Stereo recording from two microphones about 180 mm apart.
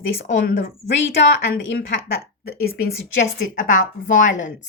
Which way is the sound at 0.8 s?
80° left.